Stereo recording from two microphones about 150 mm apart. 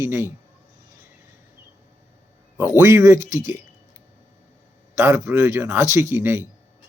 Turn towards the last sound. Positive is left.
turn(degrees=-15)  # may be behind; listen again after turning